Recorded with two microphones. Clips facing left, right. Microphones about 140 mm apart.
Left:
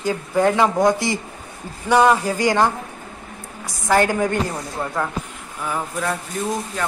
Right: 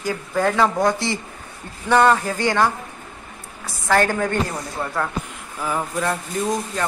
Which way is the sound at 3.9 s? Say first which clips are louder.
Left 1 dB; 15° left (ahead or behind).